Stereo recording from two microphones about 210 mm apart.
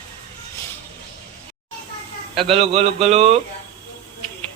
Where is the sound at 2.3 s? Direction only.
25° right (ahead or behind).